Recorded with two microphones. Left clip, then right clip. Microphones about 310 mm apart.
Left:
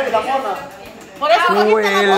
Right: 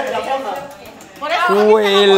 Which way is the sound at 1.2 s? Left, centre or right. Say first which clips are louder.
Left 2 dB; left.